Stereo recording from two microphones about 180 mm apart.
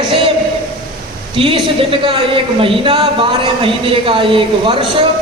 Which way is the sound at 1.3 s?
30° right (ahead or behind).